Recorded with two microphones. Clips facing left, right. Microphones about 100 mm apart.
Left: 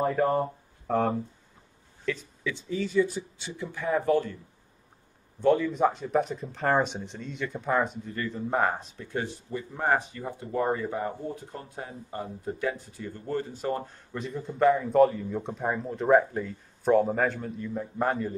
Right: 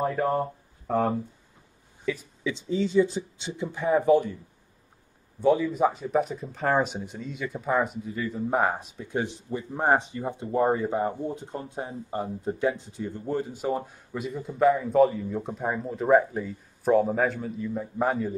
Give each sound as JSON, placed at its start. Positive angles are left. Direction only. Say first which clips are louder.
{"t": 0.0, "sound": "speech", "louder": "left 1 dB", "side_deg": 0}
{"t": 2.0, "sound": "speech", "louder": "right 2 dB", "side_deg": -20}
{"t": 5.4, "sound": "speech", "louder": "right 1 dB", "side_deg": -5}